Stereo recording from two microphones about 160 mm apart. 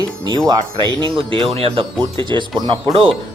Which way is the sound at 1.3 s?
35° right (ahead or behind).